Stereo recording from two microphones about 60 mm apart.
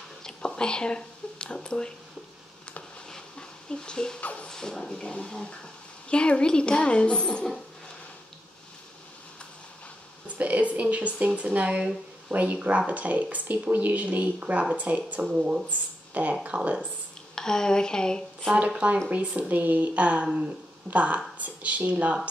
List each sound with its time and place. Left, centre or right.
0.2 s whispering: centre
3.1 s a sound: centre
4.2 s music: left
4.5 s speech: centre
10.2 s speech: right
17.4 s speech: centre
18.5 s speech: centre